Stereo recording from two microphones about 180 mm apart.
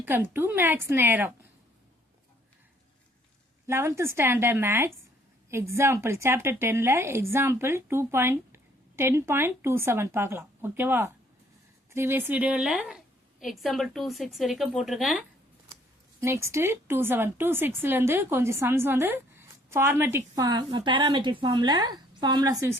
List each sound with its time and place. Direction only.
0.0 s speech: 10° right (ahead or behind)
3.7 s speech: 15° right (ahead or behind)
16.2 s a woman's voice: 15° right (ahead or behind)